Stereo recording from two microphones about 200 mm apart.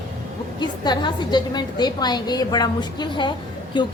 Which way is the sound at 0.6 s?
20° left (ahead or behind).